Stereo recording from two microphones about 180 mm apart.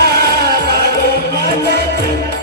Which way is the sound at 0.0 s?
60° right (ahead or behind).